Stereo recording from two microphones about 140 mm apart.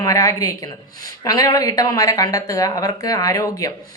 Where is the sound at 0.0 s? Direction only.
25° left (ahead or behind).